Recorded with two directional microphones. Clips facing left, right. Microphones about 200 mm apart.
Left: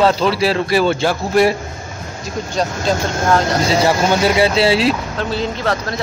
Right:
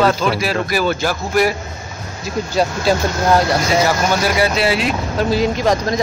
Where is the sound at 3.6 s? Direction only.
25° left (ahead or behind).